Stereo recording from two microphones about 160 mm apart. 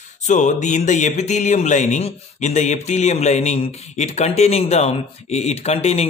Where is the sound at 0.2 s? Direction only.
50° left (ahead or behind).